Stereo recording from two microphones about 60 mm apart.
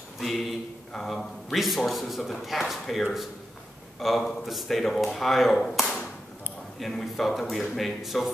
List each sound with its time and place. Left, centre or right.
0.2 s a man's voice: centre